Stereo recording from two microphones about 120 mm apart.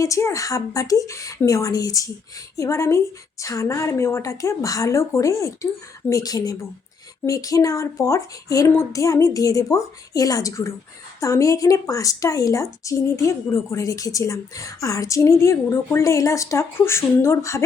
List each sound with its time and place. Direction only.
0.0 s speech: 25° left (ahead or behind)